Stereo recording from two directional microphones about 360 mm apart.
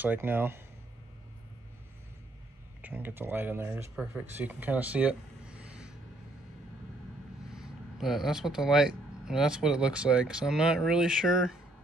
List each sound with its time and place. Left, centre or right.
0.0 s speech: centre
2.8 s speech: centre
7.4 s speech: centre